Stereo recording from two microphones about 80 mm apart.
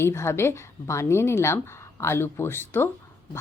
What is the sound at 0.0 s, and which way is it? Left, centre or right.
Speech, left.